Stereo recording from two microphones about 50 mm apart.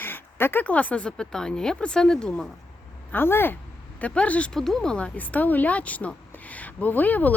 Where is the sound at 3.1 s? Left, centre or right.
Left.